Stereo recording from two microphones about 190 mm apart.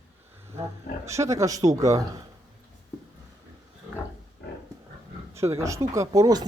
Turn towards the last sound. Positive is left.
turn(degrees=-20)  # may be behind; listen again after turning